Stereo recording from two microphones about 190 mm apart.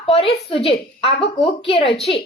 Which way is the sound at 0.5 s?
30° left (ahead or behind).